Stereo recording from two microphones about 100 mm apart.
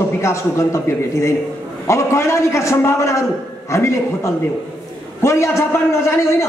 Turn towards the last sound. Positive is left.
turn(degrees=30)  # may be behind; listen again after turning